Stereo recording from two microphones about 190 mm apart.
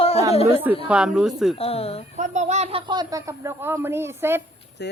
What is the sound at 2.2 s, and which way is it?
Speech, 35° right (ahead or behind).